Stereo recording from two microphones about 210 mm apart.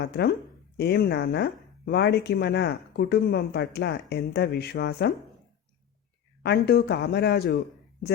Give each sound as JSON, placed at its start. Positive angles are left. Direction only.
{"t": 0.8, "sound": "speech", "side_deg": 50}
{"t": 6.4, "sound": "speech", "side_deg": 50}